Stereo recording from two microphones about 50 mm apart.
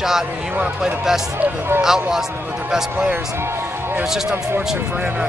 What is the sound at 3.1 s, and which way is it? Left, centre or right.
Music, right.